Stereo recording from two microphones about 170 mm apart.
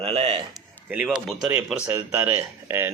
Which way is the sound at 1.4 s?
5° right (ahead or behind).